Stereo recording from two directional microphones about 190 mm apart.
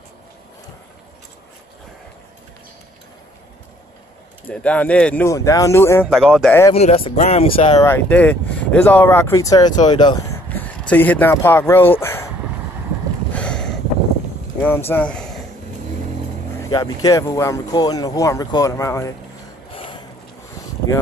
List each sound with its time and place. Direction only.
4.5 s speech: 5° left (ahead or behind)
6.1 s speech: centre (ahead or behind)
6.7 s speech: 30° left (ahead or behind)
7.8 s speech: 10° left (ahead or behind)
10.5 s speech: 10° left (ahead or behind)
13.3 s boat: 5° left (ahead or behind)
14.9 s speech: 5° left (ahead or behind)
16.5 s speech: 20° left (ahead or behind)
19.7 s a sound: 30° left (ahead or behind)